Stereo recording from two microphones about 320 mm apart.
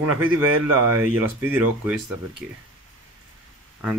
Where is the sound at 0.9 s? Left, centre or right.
Centre.